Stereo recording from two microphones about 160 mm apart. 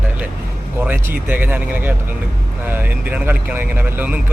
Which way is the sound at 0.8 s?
15° right (ahead or behind).